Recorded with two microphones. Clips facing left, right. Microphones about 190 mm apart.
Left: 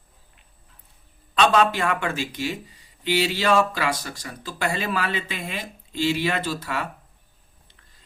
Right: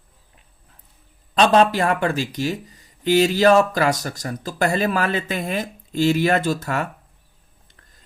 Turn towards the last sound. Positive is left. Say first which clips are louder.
# right 5 dB
turn(degrees=-45)  # may be behind; listen again after turning